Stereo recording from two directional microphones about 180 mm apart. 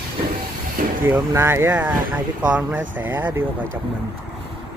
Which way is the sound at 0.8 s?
50° right (ahead or behind).